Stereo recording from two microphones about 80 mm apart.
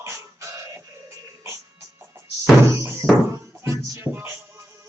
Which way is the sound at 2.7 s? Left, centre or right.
Right.